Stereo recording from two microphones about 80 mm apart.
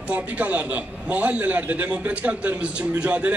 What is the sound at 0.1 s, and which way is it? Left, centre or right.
A man's voice, centre.